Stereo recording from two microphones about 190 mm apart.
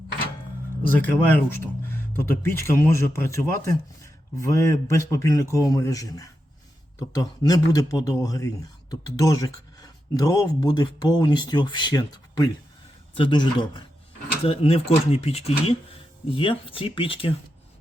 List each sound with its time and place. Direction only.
1.0 s a man's voice: 10° left (ahead or behind); by 17.3 s 30° left (ahead or behind)